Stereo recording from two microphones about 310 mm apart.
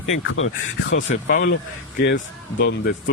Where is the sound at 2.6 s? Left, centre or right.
Left.